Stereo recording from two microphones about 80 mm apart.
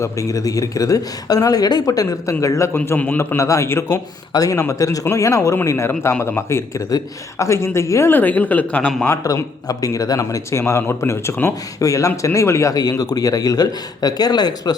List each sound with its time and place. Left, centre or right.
0.0 s speech: left
2.7 s a man's voice: left
4.3 s a man's voice: left
8.1 s speech: left
9.2 s speech: left
11.8 s a man's voice: left
12.7 s speech: left